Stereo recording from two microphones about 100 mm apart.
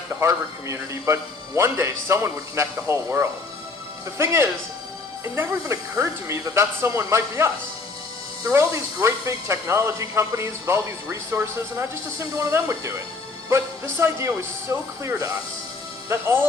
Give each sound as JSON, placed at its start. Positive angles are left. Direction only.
{"t": 0.2, "sound": "speech", "side_deg": -30}
{"t": 4.2, "sound": "speech", "side_deg": -25}
{"t": 8.5, "sound": "speech", "side_deg": -25}
{"t": 12.4, "sound": "speech", "side_deg": -30}